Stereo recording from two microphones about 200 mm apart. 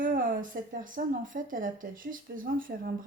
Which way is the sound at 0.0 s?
45° right (ahead or behind).